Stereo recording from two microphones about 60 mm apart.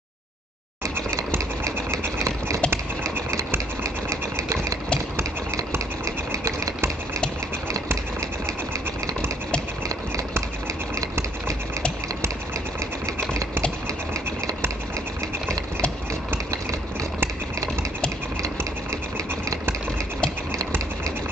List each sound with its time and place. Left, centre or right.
1.6 s sewing machine: right
3.0 s engine: right
3.8 s sewing machine: right
6.0 s sewing machine: right